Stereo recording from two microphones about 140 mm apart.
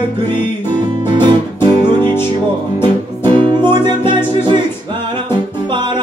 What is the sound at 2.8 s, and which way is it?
Music, 35° right (ahead or behind).